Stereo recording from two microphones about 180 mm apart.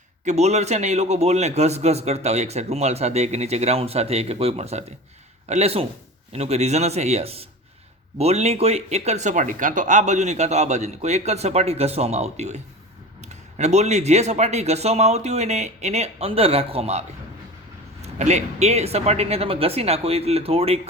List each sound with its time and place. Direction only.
0.3 s a man's voice: 40° right (ahead or behind)
18.0 s a man's voice: 40° right (ahead or behind)